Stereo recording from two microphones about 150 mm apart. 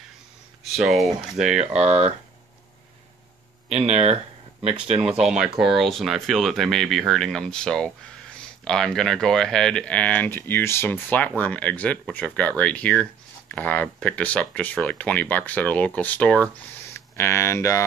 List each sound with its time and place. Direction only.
0.7 s speech: centre (ahead or behind)
1.4 s speech: 50° right (ahead or behind)
3.7 s speech: 45° right (ahead or behind)
5.2 s speech: 5° right (ahead or behind); by 17.8 s 20° left (ahead or behind)